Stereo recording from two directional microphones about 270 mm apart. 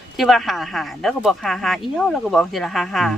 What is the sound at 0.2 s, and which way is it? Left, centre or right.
Speech, centre.